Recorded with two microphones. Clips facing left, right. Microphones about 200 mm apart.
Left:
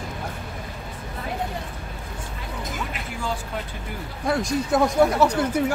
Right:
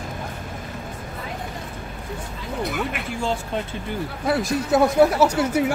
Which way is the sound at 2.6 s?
65° right (ahead or behind).